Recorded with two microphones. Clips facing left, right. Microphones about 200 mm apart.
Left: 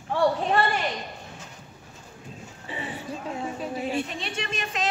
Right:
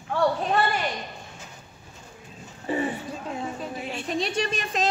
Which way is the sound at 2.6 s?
45° right (ahead or behind).